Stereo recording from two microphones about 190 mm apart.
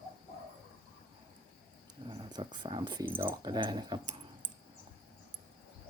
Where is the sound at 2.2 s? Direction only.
25° right (ahead or behind).